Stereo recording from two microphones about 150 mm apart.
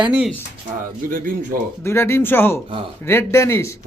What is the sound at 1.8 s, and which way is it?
Speech, 15° left (ahead or behind).